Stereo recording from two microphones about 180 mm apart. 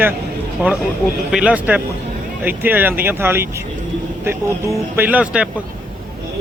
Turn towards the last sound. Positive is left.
turn(degrees=-5)  # may be behind; listen again after turning